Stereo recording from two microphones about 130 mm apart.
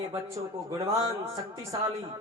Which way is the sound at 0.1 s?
25° right (ahead or behind).